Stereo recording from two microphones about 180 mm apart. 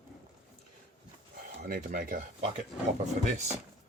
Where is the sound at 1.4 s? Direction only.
50° right (ahead or behind).